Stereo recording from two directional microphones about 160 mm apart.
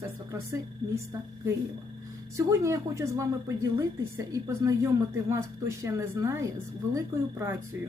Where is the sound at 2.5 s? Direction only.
20° right (ahead or behind).